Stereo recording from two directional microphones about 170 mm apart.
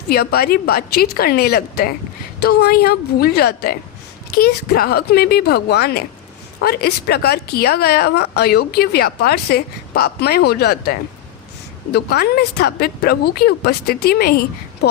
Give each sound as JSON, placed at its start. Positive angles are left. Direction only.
{"t": 0.1, "sound": "a woman's voice", "side_deg": 65}
{"t": 11.9, "sound": "a woman's voice", "side_deg": 65}